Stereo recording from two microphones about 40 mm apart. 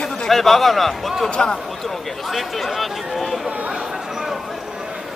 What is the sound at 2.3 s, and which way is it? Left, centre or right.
Speech, centre.